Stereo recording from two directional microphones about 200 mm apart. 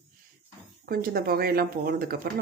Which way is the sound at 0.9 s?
50° right (ahead or behind).